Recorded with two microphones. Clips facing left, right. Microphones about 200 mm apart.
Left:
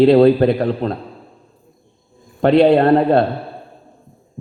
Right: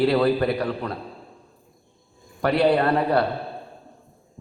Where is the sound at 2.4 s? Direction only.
25° left (ahead or behind).